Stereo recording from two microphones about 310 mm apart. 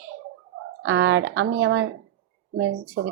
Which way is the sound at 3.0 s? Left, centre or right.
Right.